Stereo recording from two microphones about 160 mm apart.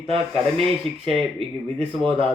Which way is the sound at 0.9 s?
40° right (ahead or behind).